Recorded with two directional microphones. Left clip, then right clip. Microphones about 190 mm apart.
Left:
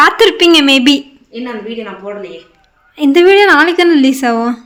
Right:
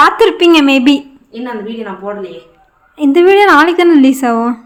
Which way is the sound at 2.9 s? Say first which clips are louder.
Even; centre (ahead or behind).